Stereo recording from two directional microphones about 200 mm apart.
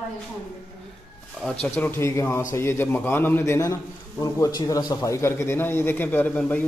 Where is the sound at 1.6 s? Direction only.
5° left (ahead or behind).